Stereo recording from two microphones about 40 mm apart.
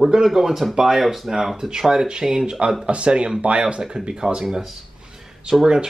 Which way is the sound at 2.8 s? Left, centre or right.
Right.